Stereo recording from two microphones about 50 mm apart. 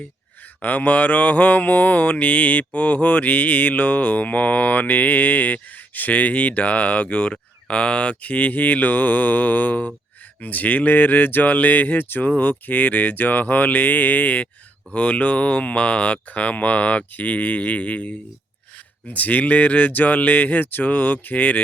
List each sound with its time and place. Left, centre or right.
0.6 s mantra: left
14.9 s speech: left
19.0 s mantra: left